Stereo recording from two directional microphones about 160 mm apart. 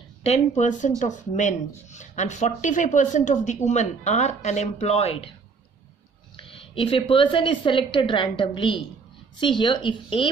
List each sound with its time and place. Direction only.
0.2 s speech: 45° left (ahead or behind)
6.3 s a woman's voice: 35° left (ahead or behind)